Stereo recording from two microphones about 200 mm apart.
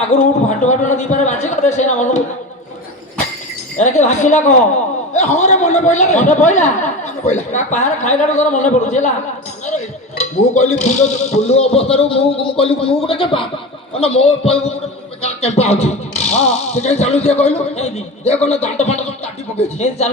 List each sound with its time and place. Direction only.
0.1 s a man's voice: 35° left (ahead or behind)
3.8 s a man's voice: 35° left (ahead or behind)